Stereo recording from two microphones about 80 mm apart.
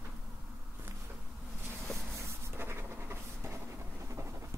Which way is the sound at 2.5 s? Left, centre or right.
Right.